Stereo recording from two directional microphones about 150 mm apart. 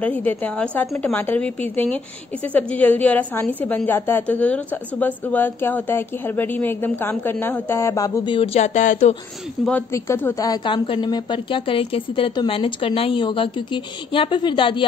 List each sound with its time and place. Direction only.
0.0 s a woman's voice: 10° left (ahead or behind)
8.5 s speech: 50° left (ahead or behind)
9.7 s a woman's voice: 15° left (ahead or behind); by 14.9 s 35° left (ahead or behind)